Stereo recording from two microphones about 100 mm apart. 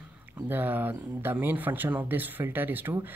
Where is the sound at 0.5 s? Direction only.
20° right (ahead or behind).